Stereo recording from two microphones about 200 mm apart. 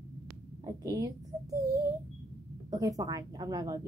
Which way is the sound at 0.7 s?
20° right (ahead or behind).